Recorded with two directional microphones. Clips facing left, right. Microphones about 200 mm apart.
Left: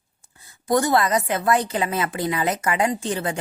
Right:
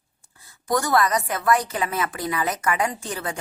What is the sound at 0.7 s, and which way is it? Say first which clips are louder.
A woman's voice: left 2 dB; 25° left (ahead or behind).